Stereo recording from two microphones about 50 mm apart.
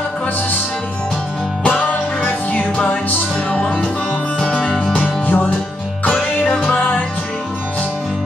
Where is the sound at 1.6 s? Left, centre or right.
Left.